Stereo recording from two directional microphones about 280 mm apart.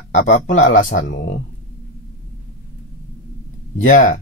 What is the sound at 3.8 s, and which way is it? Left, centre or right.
Speech, left.